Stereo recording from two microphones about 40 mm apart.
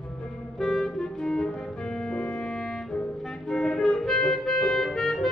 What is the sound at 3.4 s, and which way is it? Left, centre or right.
Music, left.